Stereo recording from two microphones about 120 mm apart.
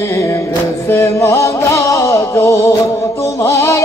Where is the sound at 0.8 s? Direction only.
20° left (ahead or behind).